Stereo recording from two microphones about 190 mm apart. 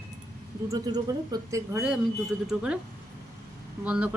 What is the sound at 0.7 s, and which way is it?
Speech, 20° right (ahead or behind).